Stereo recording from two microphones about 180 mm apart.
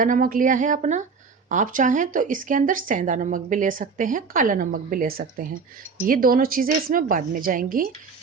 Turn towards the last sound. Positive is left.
turn(degrees=-50)  # may be behind; listen again after turning